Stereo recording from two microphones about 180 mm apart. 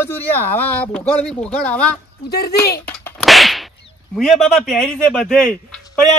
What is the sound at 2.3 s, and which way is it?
Speech, 60° left (ahead or behind).